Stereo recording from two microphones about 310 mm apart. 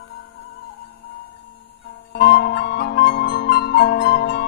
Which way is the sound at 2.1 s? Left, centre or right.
Left.